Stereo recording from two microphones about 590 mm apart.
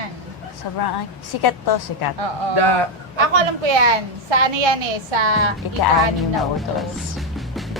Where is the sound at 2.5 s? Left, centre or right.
Right.